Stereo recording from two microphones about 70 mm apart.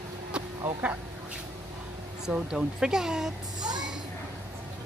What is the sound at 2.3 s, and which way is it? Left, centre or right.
Speech, centre.